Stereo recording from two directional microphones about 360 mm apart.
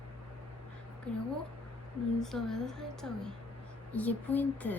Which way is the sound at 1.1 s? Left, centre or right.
Centre.